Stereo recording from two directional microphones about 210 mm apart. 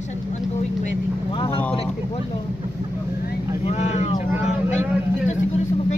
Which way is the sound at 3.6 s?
30° left (ahead or behind).